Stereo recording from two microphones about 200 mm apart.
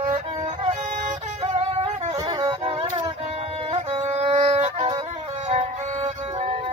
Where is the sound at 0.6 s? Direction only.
35° right (ahead or behind).